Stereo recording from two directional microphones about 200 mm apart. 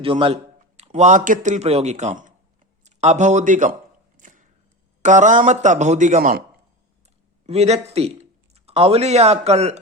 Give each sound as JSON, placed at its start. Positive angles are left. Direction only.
{"t": 0.0, "sound": "speech", "side_deg": -25}
{"t": 4.2, "sound": "a sound", "side_deg": -40}
{"t": 5.0, "sound": "speech", "side_deg": -40}
{"t": 7.4, "sound": "speech", "side_deg": -30}